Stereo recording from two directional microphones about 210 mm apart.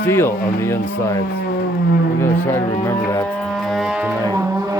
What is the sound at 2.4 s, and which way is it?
Speech, 10° left (ahead or behind).